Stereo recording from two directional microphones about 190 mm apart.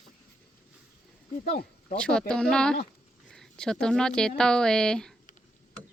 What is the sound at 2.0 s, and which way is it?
A woman's voice, 5° left (ahead or behind).